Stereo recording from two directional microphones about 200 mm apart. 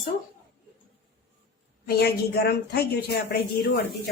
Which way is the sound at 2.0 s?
55° left (ahead or behind).